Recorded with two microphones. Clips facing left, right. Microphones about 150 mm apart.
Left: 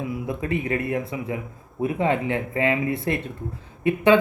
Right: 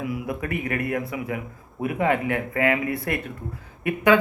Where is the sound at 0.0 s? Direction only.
25° left (ahead or behind).